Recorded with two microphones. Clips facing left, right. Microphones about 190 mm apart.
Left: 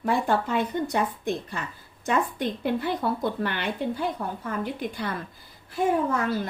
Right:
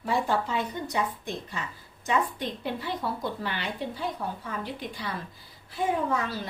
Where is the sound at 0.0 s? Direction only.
55° left (ahead or behind).